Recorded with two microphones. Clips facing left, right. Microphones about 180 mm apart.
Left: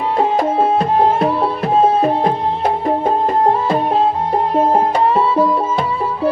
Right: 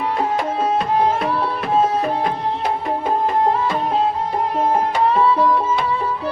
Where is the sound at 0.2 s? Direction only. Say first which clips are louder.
Left 8 dB; 40° left (ahead or behind).